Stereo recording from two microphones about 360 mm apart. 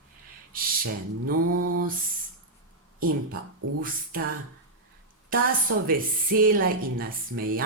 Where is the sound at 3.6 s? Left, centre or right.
Right.